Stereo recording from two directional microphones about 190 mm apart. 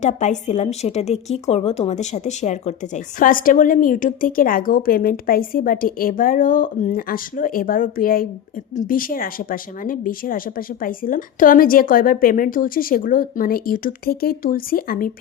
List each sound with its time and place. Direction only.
0.0 s speech: 40° left (ahead or behind)